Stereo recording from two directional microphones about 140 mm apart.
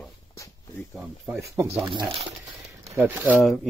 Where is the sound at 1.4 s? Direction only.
20° right (ahead or behind).